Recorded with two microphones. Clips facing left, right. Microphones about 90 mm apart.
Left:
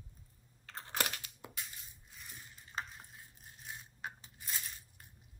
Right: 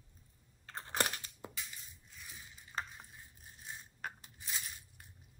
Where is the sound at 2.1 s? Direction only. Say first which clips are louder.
Even; centre (ahead or behind).